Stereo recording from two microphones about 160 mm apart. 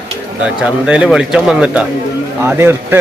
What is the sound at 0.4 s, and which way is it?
Speech, 5° right (ahead or behind).